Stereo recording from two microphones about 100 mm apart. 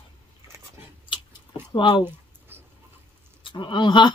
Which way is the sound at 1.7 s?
60° left (ahead or behind).